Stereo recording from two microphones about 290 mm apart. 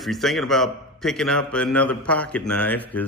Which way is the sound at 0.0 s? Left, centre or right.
Centre.